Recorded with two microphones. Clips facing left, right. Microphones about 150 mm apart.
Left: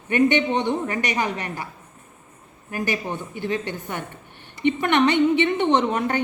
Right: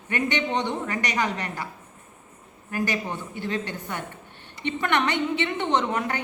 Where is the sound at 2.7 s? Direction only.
20° left (ahead or behind).